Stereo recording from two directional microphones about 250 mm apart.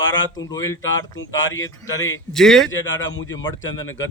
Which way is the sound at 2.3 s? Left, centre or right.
Centre.